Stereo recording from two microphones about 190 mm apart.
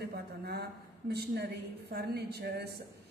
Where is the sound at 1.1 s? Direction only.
60° right (ahead or behind).